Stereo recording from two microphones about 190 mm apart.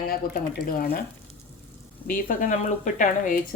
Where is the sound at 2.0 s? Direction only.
45° left (ahead or behind).